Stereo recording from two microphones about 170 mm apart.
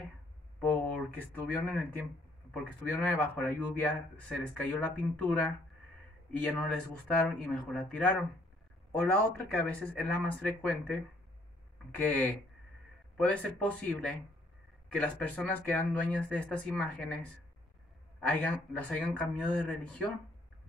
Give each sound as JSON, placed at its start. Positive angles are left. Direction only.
{"t": 0.6, "sound": "a man's voice", "side_deg": 10}